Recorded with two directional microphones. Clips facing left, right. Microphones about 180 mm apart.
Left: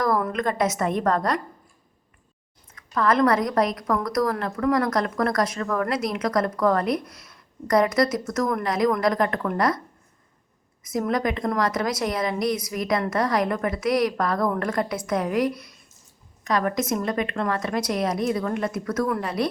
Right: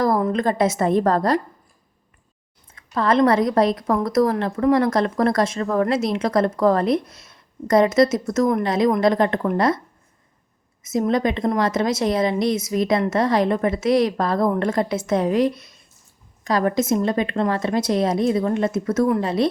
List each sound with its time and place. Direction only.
0.0 s a woman's voice: 25° right (ahead or behind)
2.7 s a woman's voice: 30° right (ahead or behind)
10.8 s a woman's voice: 25° right (ahead or behind)